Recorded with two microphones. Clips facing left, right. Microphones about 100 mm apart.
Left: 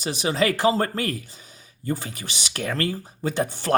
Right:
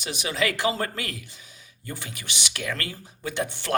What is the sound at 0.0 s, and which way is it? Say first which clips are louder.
Speech: left 4 dB; 35° left (ahead or behind).